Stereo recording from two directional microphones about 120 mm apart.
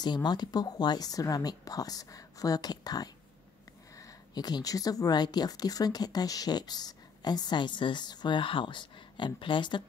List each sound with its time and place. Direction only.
0.0 s a woman's voice: 35° left (ahead or behind)
4.3 s a woman's voice: 35° left (ahead or behind)